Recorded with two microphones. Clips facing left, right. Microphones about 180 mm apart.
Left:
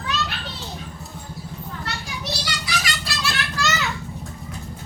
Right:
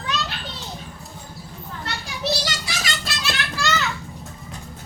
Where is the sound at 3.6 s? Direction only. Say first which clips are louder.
Right 1 dB; 10° left (ahead or behind).